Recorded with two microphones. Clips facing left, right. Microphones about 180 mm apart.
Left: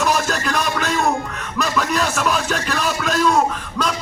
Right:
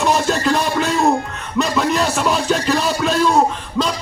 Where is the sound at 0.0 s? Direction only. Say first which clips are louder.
Right 3 dB; 30° right (ahead or behind).